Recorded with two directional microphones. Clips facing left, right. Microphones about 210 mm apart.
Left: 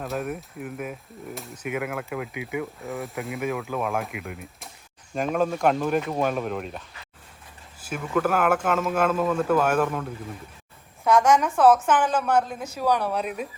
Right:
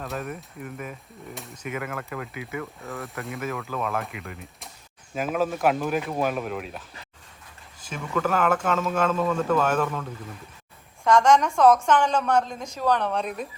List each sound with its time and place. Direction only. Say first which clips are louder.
0.0 s speech: left 3 dB; 5° left (ahead or behind)
3.0 s speech: left 2 dB; centre (ahead or behind)
3.7 s speech: left 2 dB; 10° left (ahead or behind)